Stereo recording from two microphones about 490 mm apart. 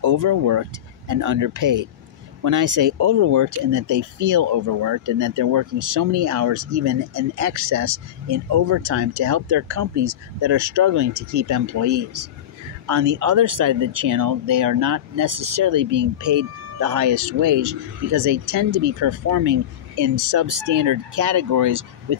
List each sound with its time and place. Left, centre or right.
0.0 s speech: right
18.7 s speech: right
18.9 s speech: right